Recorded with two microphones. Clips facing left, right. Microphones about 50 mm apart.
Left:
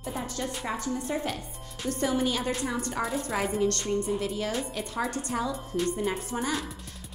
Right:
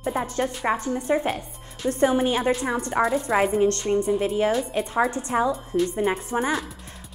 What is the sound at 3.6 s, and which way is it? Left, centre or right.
Speech, right.